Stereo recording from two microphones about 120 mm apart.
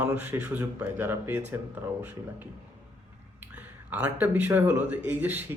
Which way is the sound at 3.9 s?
15° right (ahead or behind).